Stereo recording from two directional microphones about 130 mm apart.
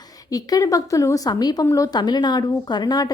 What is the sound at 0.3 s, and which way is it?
A woman's voice, 30° left (ahead or behind).